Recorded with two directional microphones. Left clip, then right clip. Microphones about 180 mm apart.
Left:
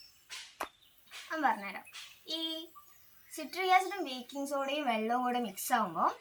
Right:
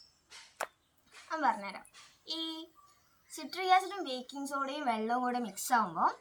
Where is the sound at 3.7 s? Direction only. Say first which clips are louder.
Even; 15° right (ahead or behind).